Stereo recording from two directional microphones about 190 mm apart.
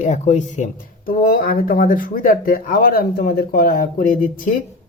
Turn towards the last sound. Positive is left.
turn(degrees=45)  # may be behind; listen again after turning